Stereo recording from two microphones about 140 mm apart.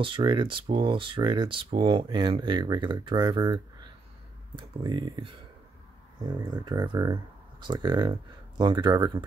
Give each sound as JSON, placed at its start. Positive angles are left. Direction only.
{"t": 0.0, "sound": "speech", "side_deg": -35}